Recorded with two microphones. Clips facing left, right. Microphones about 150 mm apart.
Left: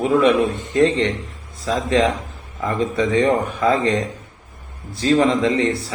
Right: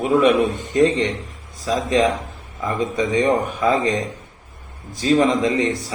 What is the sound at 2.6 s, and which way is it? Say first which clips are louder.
Speech: left 1 dB; 15° right (ahead or behind).